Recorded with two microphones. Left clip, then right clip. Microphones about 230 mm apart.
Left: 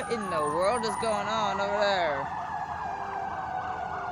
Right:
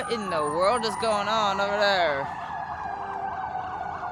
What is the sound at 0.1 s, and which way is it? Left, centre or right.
Speech, centre.